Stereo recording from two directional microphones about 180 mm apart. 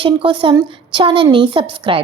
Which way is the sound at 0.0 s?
30° right (ahead or behind).